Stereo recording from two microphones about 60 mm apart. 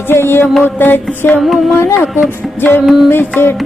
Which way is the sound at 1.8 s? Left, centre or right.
Left.